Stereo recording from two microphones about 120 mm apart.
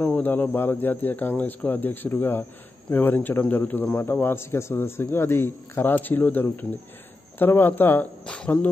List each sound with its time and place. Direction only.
0.0 s speech: 15° left (ahead or behind)